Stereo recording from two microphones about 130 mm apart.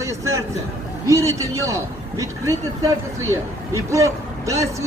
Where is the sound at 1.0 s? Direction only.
25° right (ahead or behind).